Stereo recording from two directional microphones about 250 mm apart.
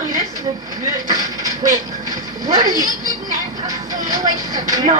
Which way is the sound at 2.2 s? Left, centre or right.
Centre.